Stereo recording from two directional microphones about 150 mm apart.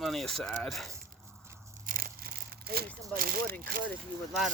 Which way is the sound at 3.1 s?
75° right (ahead or behind).